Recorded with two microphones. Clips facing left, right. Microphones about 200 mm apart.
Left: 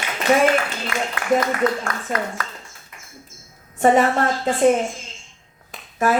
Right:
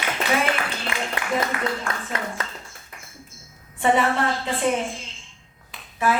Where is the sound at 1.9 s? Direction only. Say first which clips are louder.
Left 1 dB; 45° left (ahead or behind).